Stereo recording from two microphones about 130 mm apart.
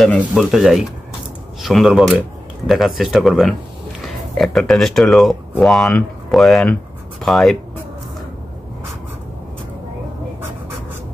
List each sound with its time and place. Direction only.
0.0 s speech: centre (ahead or behind)